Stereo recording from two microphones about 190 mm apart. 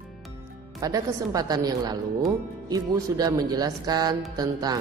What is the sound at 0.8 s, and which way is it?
Mantra, 20° right (ahead or behind).